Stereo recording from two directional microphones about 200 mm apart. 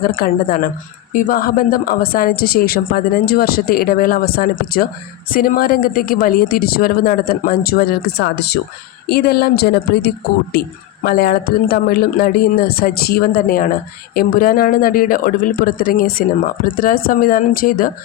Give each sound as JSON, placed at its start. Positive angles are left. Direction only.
{"t": 0.2, "sound": "speech", "side_deg": 50}